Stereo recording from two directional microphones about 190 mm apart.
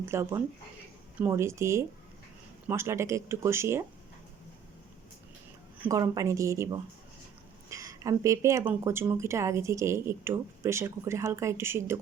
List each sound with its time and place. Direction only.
0.0 s speech: 15° right (ahead or behind)
5.8 s speech: 15° right (ahead or behind)